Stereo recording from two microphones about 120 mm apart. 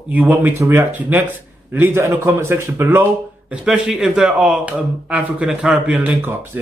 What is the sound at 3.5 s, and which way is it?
Speech, 5° right (ahead or behind).